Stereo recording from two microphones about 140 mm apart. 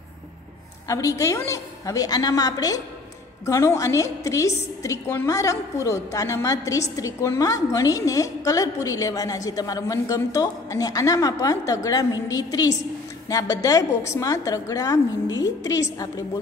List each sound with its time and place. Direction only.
0.8 s a woman's voice: 25° left (ahead or behind)